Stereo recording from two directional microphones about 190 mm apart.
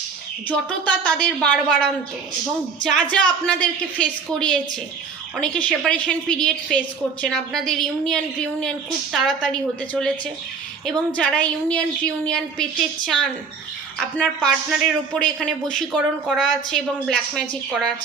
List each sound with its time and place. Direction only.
0.4 s a woman's voice: 5° left (ahead or behind)
14.0 s a man's voice: 5° left (ahead or behind)